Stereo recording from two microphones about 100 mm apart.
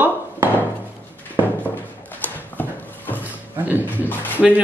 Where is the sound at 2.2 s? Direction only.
20° left (ahead or behind).